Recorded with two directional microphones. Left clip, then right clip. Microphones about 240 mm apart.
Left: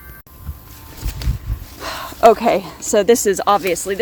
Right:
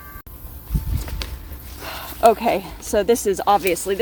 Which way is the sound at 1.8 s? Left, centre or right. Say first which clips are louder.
Left 4 dB; left.